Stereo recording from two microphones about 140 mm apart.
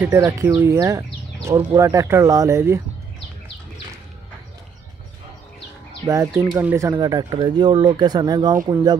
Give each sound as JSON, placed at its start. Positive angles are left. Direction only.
{"t": 0.0, "sound": "speech", "side_deg": -15}
{"t": 6.0, "sound": "speech", "side_deg": -20}
{"t": 6.9, "sound": "speech", "side_deg": -30}